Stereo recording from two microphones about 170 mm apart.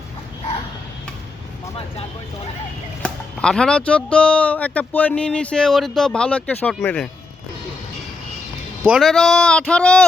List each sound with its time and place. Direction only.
3.0 s speech: 5° left (ahead or behind)
8.8 s speech: 5° right (ahead or behind)